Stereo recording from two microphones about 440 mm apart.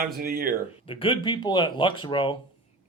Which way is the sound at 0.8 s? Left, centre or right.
Centre.